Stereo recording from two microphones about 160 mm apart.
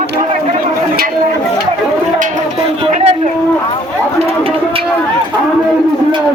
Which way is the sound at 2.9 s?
40° right (ahead or behind).